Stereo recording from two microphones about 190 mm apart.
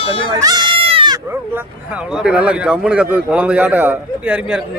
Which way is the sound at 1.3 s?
10° right (ahead or behind).